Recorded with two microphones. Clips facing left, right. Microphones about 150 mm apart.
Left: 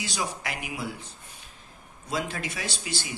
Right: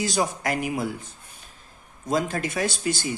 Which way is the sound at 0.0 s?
45° right (ahead or behind).